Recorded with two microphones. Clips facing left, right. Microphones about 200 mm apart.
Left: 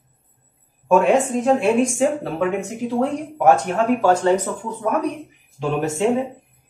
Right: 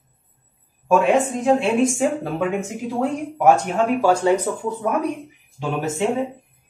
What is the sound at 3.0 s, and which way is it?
Speech, 10° right (ahead or behind).